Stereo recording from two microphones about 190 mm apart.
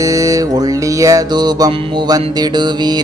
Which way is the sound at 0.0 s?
15° right (ahead or behind).